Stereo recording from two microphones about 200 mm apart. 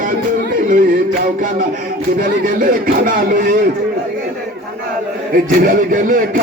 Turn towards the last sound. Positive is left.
turn(degrees=-45)  # may be behind; listen again after turning